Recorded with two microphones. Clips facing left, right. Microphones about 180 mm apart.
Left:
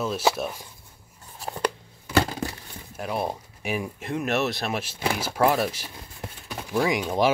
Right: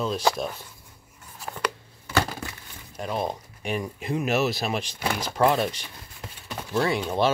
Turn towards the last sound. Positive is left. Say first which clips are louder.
# left 1 dB
turn(degrees=10)  # may be behind; listen again after turning